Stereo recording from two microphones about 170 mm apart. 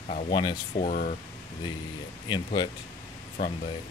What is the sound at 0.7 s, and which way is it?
Speech, 45° left (ahead or behind).